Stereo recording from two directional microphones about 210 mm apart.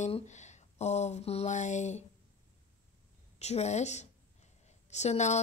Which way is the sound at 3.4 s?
30° left (ahead or behind).